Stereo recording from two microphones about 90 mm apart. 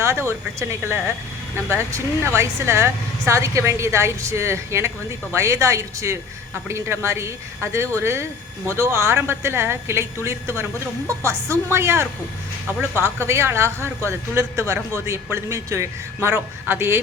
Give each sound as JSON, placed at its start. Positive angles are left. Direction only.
{"t": 0.0, "sound": "speech", "side_deg": -30}